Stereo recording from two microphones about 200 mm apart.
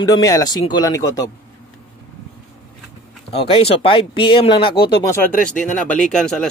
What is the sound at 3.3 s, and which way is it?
Speech, 25° left (ahead or behind).